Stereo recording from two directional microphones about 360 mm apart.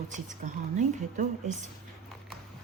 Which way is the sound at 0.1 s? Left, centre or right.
Right.